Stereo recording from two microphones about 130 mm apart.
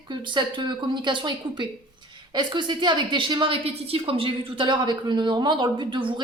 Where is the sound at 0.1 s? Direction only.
35° right (ahead or behind).